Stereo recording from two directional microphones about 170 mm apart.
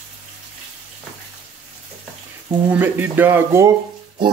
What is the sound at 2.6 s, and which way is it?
Speech, 10° right (ahead or behind).